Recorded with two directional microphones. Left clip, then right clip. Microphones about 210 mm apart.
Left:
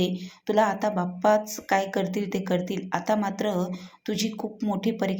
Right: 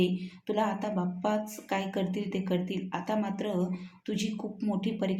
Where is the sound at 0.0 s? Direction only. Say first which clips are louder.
Left 2 dB; 20° left (ahead or behind).